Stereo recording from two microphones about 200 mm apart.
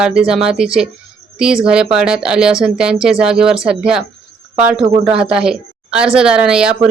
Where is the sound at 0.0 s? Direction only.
5° right (ahead or behind).